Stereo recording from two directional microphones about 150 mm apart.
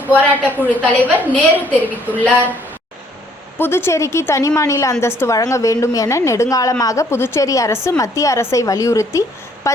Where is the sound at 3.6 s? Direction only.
15° left (ahead or behind).